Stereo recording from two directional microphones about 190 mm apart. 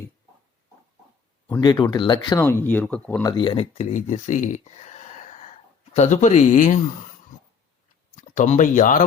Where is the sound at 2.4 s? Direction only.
10° left (ahead or behind).